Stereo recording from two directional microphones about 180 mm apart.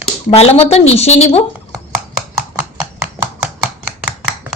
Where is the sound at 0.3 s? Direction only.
35° left (ahead or behind).